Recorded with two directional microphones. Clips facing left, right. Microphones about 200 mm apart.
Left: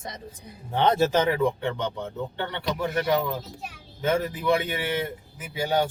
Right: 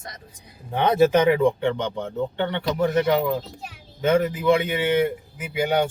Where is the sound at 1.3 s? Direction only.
25° right (ahead or behind).